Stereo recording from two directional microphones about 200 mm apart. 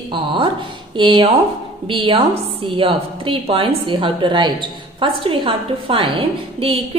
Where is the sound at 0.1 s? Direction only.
25° right (ahead or behind).